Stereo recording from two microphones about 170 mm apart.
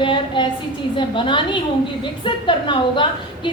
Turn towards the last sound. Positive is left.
turn(degrees=30)  # may be behind; listen again after turning